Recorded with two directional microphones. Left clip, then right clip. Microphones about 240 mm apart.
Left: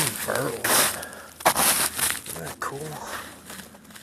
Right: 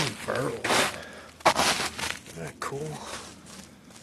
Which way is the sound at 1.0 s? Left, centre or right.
Centre.